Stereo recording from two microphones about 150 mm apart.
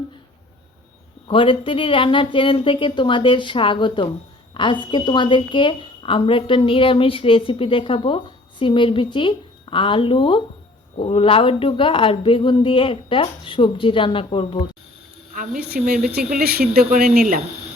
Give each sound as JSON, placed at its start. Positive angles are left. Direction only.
{"t": 1.3, "sound": "a woman's voice", "side_deg": 35}
{"t": 15.3, "sound": "a woman's voice", "side_deg": -70}
{"t": 15.8, "sound": "speech", "side_deg": -50}
{"t": 16.0, "sound": "speech", "side_deg": -90}